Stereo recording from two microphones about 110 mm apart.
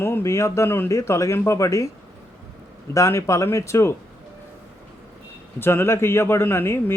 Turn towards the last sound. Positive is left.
turn(degrees=20)  # may be behind; listen again after turning